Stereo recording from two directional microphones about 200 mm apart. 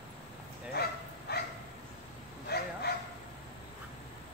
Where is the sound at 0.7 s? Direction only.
50° left (ahead or behind).